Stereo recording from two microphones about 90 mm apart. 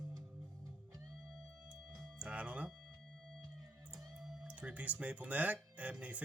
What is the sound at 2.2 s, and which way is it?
Music, 15° right (ahead or behind).